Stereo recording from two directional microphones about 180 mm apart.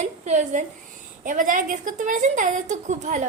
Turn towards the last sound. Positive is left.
turn(degrees=-40)  # may be behind; listen again after turning